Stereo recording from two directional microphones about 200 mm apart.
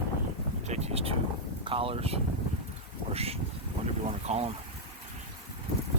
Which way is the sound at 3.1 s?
30° right (ahead or behind).